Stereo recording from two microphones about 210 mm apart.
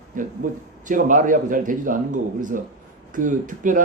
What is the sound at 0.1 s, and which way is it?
Speech, 40° right (ahead or behind).